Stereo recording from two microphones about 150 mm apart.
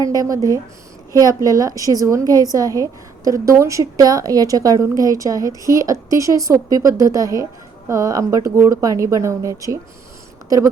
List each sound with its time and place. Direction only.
0.0 s a woman's voice: 25° right (ahead or behind)